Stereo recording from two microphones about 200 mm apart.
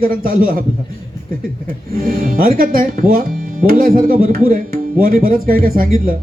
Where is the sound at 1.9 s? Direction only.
45° right (ahead or behind).